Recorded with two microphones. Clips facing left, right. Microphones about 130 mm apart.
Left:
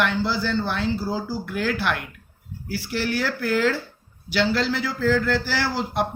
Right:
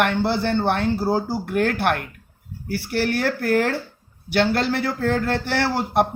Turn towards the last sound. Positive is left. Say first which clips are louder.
# right 4 dB
turn(degrees=-55)  # may be behind; listen again after turning